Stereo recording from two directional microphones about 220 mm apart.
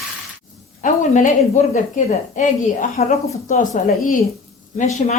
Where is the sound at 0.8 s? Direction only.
35° left (ahead or behind).